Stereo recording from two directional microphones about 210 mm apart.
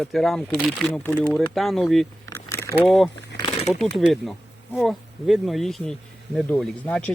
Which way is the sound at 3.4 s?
30° left (ahead or behind).